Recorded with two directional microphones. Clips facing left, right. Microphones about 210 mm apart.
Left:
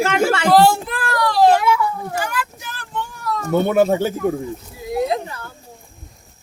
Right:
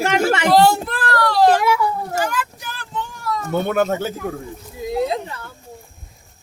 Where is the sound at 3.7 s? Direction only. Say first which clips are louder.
Left 4 dB; 10° left (ahead or behind).